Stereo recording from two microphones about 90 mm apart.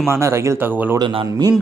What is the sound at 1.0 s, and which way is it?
Speech, 75° right (ahead or behind).